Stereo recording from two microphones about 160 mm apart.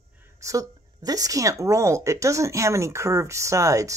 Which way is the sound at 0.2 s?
20° right (ahead or behind).